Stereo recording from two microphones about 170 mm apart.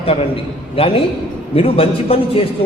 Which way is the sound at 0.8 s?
35° left (ahead or behind).